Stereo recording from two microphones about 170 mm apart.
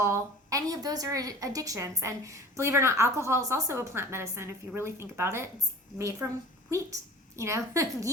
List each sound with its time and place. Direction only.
0.0 s a woman's voice: 20° right (ahead or behind)